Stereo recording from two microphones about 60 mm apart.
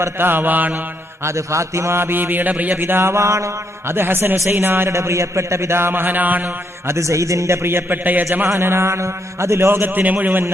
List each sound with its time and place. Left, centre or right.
0.0 s mantra: right
1.2 s a man's voice: right
3.9 s mantra: right
4.9 s a man's voice: right
6.8 s a man's voice: right